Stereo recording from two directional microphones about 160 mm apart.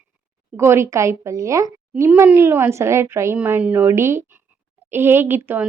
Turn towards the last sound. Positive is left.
turn(degrees=-15)  # may be behind; listen again after turning